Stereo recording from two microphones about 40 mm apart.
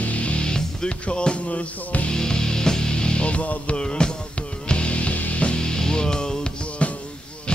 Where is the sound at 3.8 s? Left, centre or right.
Left.